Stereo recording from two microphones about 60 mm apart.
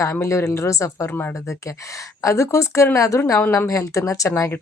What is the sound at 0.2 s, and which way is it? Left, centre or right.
Speech, left.